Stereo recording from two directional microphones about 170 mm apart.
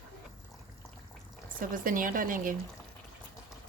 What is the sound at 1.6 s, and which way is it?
Speech, 55° right (ahead or behind).